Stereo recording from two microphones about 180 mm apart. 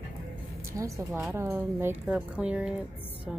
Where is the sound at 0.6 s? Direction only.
15° right (ahead or behind).